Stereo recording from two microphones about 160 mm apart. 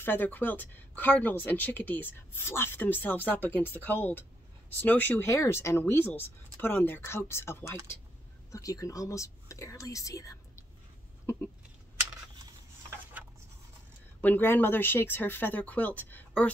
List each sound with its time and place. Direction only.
0.0 s speech: 10° left (ahead or behind)
14.2 s speech: 10° left (ahead or behind)